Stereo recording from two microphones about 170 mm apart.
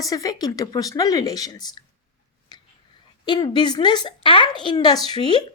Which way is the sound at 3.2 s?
25° left (ahead or behind).